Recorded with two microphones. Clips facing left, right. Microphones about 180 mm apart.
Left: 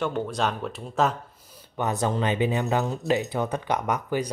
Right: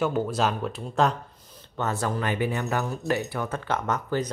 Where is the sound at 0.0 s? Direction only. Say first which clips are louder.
Right 2 dB; 5° right (ahead or behind).